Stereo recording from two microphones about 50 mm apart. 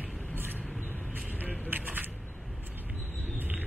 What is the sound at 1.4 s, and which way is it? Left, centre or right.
Vehicle, right.